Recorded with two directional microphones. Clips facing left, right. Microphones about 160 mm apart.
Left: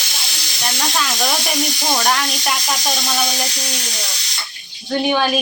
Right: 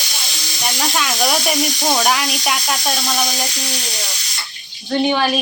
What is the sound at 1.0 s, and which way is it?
Speech, centre (ahead or behind).